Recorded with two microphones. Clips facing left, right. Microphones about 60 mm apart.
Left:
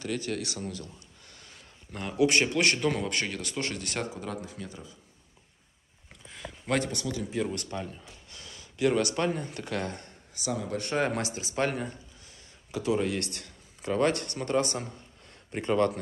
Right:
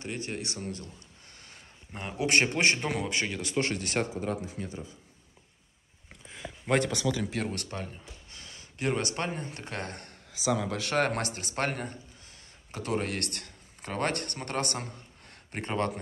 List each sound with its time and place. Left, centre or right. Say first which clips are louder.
0.0 s speech: left 3 dB; right
1.9 s speech: left 7 dB; right
2.2 s a man's voice: left 1 dB; right
2.9 s speech: left 1 dB; centre
3.5 s speech: right 6 dB; right
6.2 s a sound: even; centre
6.8 s speech: right 3 dB; right
7.7 s speech: left 2 dB; right
10.5 s a man's voice: right 2 dB; right
11.0 s speech: right 1 dB; right